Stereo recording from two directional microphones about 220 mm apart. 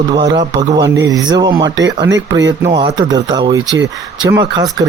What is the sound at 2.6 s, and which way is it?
Speech, 15° right (ahead or behind).